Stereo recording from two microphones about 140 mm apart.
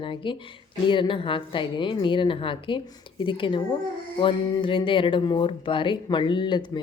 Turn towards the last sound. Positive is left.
turn(degrees=35)  # may be behind; listen again after turning